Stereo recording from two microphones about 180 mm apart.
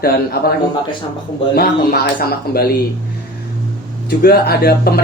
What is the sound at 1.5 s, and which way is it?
Speech, 55° left (ahead or behind).